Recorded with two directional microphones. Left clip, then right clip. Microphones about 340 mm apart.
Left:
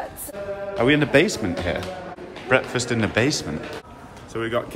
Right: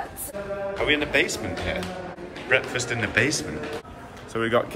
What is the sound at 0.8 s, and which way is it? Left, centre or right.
Speech, left.